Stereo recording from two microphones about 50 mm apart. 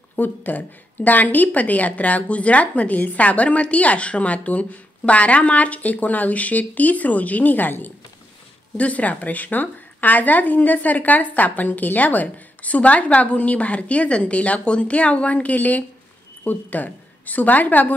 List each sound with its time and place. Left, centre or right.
0.2 s a woman's voice: left